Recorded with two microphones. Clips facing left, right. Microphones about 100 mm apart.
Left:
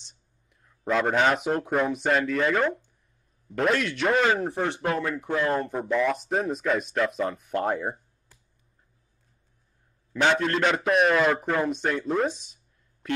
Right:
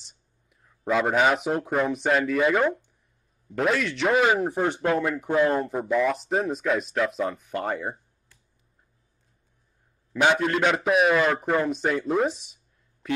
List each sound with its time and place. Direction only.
0.5 s speech: 5° right (ahead or behind)
4.5 s speech: 15° right (ahead or behind)
5.5 s speech: 5° right (ahead or behind)
10.1 s speech: 10° right (ahead or behind)